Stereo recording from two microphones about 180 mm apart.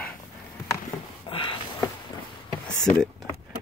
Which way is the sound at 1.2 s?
30° left (ahead or behind).